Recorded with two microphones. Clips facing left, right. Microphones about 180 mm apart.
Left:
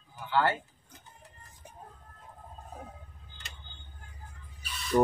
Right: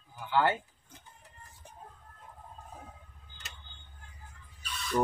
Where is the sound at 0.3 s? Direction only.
15° right (ahead or behind).